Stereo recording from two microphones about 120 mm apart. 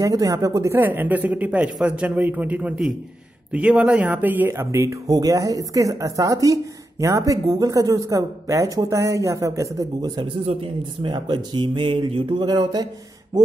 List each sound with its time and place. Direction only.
0.0 s speech: 30° right (ahead or behind)
0.7 s speech: 15° right (ahead or behind); by 10.3 s 35° right (ahead or behind)
10.4 s a man's voice: 55° right (ahead or behind)
11.1 s speech: 40° right (ahead or behind)